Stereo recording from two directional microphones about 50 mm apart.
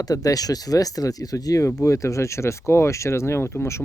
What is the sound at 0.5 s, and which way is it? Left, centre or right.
Speech, left.